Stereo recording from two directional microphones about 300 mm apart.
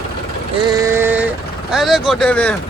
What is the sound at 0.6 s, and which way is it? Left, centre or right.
Speech, centre.